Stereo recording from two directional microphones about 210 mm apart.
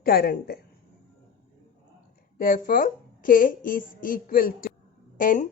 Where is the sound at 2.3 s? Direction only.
40° left (ahead or behind).